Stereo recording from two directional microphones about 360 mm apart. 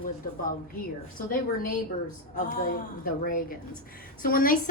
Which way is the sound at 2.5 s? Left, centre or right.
Left.